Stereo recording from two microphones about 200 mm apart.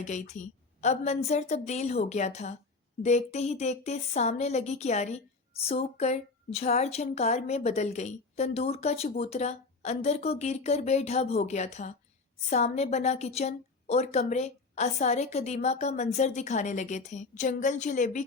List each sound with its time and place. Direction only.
0.0 s speech: 35° left (ahead or behind)